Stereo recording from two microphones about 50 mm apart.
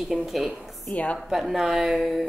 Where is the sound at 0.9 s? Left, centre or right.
Left.